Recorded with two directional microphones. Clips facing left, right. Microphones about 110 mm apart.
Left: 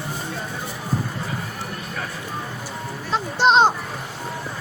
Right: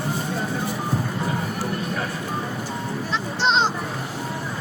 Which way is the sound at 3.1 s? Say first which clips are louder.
Left 5 dB; 45° left (ahead or behind).